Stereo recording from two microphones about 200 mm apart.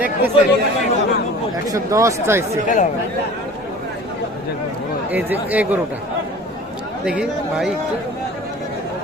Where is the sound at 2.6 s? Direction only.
40° left (ahead or behind).